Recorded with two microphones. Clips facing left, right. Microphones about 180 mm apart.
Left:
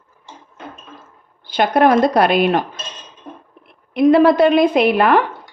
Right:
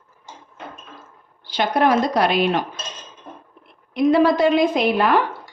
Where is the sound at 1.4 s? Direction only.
55° left (ahead or behind).